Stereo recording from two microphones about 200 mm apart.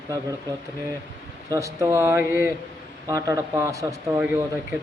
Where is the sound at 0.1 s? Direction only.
20° right (ahead or behind).